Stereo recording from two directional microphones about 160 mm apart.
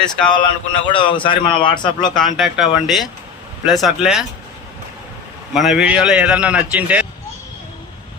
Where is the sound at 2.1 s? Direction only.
Centre (ahead or behind).